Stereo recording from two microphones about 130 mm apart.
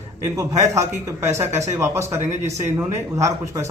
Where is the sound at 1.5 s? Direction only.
60° right (ahead or behind).